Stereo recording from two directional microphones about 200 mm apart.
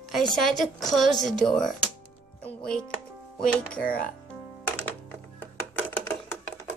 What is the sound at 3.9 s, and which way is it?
Speech, 45° left (ahead or behind).